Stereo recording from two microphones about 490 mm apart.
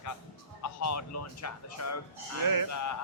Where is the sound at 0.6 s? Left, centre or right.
Left.